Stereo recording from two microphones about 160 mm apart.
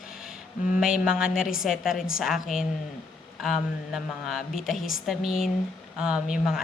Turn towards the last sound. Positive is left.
turn(degrees=-5)  # may be behind; listen again after turning